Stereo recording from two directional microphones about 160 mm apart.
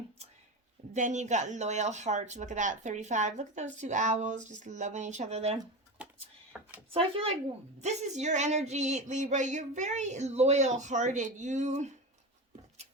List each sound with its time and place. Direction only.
0.9 s speech: 50° right (ahead or behind)
6.9 s speech: 35° right (ahead or behind)